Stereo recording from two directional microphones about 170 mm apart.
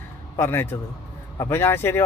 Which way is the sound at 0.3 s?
15° left (ahead or behind).